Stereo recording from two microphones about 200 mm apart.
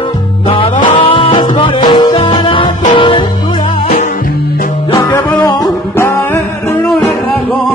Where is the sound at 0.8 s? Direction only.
25° left (ahead or behind).